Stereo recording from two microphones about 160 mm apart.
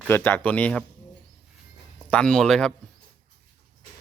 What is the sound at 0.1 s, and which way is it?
Speech, 15° left (ahead or behind).